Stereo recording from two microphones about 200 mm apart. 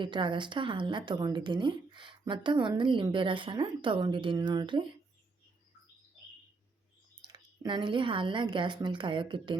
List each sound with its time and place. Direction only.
0.0 s a woman's voice: 25° right (ahead or behind)
7.2 s a woman's voice: 20° right (ahead or behind)